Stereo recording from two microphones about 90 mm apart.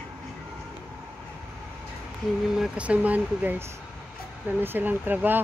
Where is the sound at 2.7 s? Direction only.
15° right (ahead or behind).